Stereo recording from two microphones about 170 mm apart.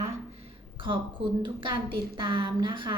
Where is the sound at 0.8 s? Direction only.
30° right (ahead or behind).